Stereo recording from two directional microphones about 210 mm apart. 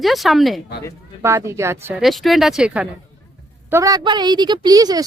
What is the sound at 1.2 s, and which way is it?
Speech, 15° right (ahead or behind).